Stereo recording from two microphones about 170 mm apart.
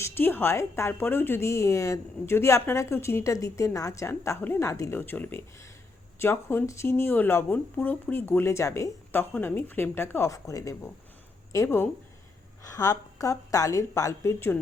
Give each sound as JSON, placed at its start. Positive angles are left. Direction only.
{"t": 0.0, "sound": "a woman's voice", "side_deg": 15}